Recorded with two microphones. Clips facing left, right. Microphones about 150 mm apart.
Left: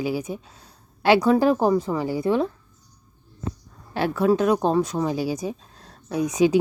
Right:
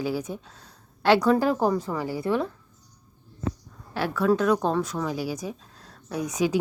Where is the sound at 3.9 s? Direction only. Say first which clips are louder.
Left 3 dB; 20° left (ahead or behind).